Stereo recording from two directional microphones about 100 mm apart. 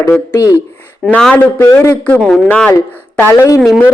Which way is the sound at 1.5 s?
25° left (ahead or behind).